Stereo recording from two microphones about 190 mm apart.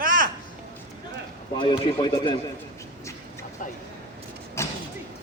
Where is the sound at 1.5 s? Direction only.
25° left (ahead or behind).